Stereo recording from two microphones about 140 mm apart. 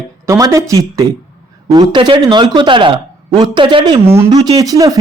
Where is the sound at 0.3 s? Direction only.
25° right (ahead or behind).